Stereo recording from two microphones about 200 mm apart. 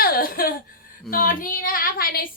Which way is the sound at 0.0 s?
45° left (ahead or behind).